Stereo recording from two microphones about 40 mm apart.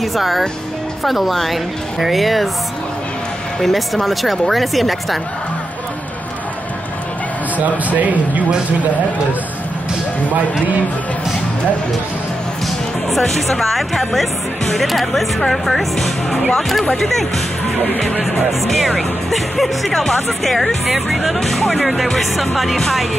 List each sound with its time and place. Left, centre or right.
0.0 s speech: centre
3.6 s speech: centre
7.5 s speech: right
13.1 s speech: centre
18.3 s speech: centre